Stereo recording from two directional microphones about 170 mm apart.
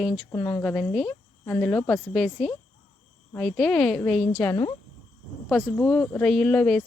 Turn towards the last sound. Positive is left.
turn(degrees=5)  # may be behind; listen again after turning